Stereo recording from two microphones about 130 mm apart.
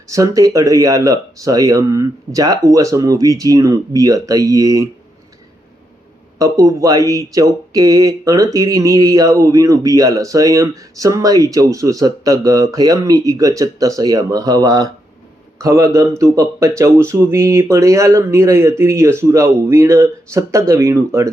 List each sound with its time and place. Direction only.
0.1 s speech: 25° right (ahead or behind)
6.4 s speech: 25° right (ahead or behind)